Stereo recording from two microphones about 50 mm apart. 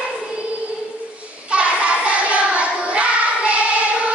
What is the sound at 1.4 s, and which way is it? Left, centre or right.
Child singing, right.